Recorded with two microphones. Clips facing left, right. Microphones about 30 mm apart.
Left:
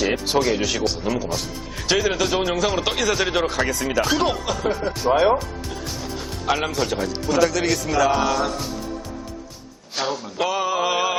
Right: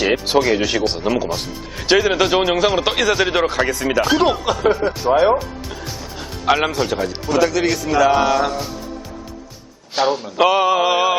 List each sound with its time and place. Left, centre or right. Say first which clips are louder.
0.0 s speech: right 4 dB; centre
1.0 s mantra: right 5 dB; right
1.7 s speech: right 5 dB; centre
4.6 s mantra: right 8 dB; right
4.9 s speech: right 3 dB; centre
6.4 s speech: right 6 dB; right
6.7 s speech: right 3 dB; centre
9.9 s mantra: right 7 dB; right